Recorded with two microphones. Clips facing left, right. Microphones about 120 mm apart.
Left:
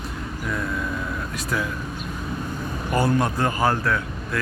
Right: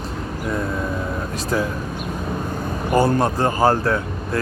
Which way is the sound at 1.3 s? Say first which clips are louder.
Right 5 dB; 30° right (ahead or behind).